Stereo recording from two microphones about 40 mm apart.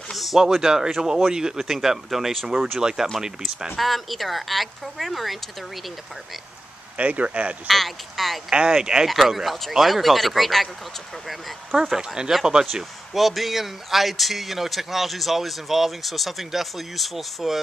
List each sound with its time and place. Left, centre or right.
0.1 s a sound: centre
0.6 s speech: centre
3.7 s speech: centre
7.0 s speech: right
7.6 s speech: centre
8.5 s speech: centre
9.0 s speech: centre
11.8 s speech: centre
13.1 s speech: centre